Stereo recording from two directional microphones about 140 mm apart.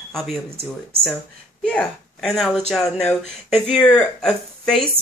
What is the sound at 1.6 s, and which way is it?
Speech, 5° left (ahead or behind).